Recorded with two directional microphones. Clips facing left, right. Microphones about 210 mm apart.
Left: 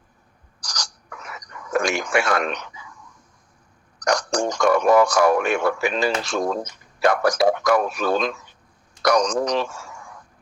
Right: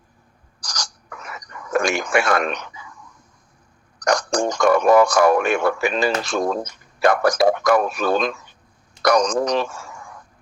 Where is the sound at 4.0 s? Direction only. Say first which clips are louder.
Right 2 dB; 50° right (ahead or behind).